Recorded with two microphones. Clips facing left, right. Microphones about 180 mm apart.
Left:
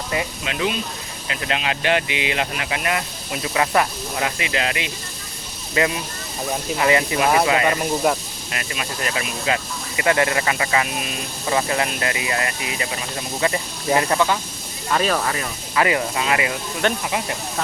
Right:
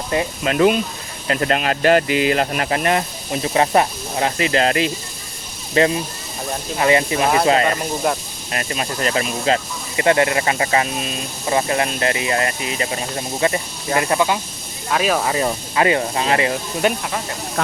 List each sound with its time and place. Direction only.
0.1 s speech: 35° right (ahead or behind)
0.5 s speech: 50° right (ahead or behind); by 7.3 s 25° right (ahead or behind)
7.6 s speech: 10° left (ahead or behind)
8.5 s speech: 35° right (ahead or behind)
14.1 s speech: 15° right (ahead or behind)
14.8 s speech: 5° right (ahead or behind)
15.7 s speech: 30° right (ahead or behind)
16.8 s speech: 10° right (ahead or behind)